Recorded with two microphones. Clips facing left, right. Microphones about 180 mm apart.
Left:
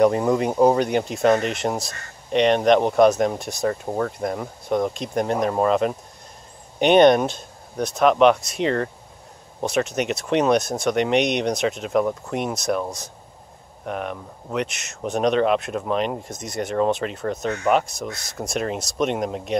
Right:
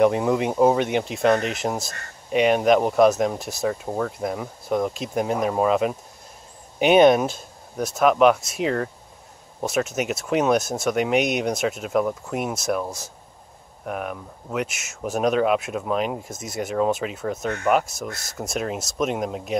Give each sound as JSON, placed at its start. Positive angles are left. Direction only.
{"t": 0.0, "sound": "speech", "side_deg": 0}